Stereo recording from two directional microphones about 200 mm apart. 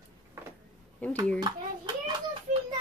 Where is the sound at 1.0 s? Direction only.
10° left (ahead or behind).